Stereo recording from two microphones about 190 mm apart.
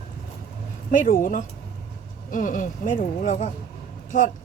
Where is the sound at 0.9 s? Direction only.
45° left (ahead or behind).